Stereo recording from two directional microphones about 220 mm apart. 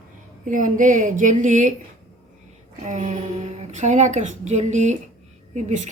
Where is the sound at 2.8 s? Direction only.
35° right (ahead or behind).